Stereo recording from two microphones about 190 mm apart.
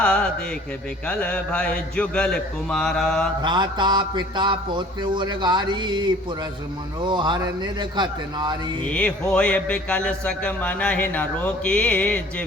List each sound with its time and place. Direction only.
0.0 s a sound: 5° left (ahead or behind)
1.0 s speech: 5° left (ahead or behind)
3.4 s speech: 25° right (ahead or behind)
8.9 s speech: 5° left (ahead or behind)